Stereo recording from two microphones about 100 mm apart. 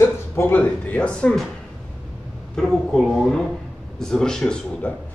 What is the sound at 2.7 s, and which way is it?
Speech, 5° left (ahead or behind).